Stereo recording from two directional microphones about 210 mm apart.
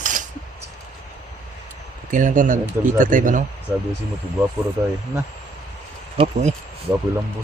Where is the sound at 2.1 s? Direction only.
40° right (ahead or behind).